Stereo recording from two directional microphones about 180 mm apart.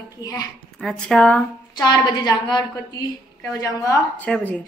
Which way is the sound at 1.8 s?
25° left (ahead or behind).